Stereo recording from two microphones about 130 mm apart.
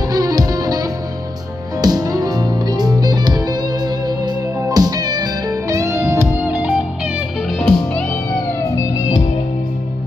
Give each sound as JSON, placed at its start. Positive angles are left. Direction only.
{"t": 0.1, "sound": "music", "side_deg": -30}
{"t": 7.5, "sound": "music", "side_deg": 5}